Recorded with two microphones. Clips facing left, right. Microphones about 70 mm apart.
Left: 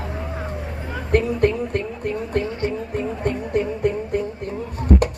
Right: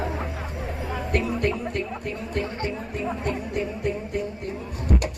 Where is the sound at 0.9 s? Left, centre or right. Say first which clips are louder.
Left 6 dB; left.